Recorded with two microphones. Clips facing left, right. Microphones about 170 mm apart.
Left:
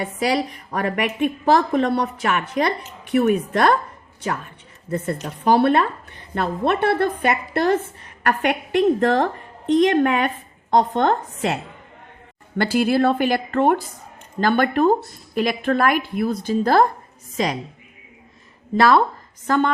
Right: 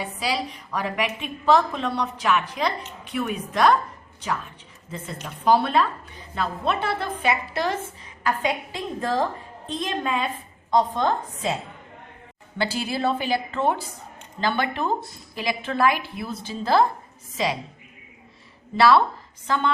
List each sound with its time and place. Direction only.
0.0 s a woman's voice: 65° left (ahead or behind)
4.9 s a woman's voice: 60° left (ahead or behind)
12.5 s a woman's voice: 55° left (ahead or behind)
18.8 s a woman's voice: 45° left (ahead or behind)